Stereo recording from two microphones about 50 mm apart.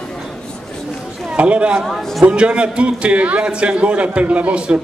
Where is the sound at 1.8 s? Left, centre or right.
Centre.